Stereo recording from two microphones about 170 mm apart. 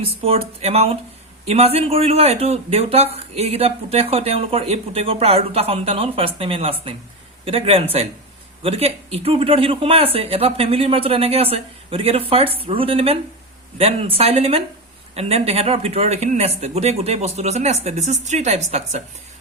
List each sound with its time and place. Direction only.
0.3 s speech: 35° right (ahead or behind)